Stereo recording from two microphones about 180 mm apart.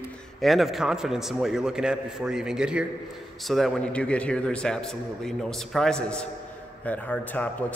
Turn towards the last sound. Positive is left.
turn(degrees=10)  # may be behind; listen again after turning